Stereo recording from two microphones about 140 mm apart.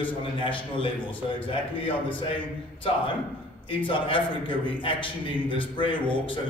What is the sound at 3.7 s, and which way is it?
A man's voice, 35° left (ahead or behind).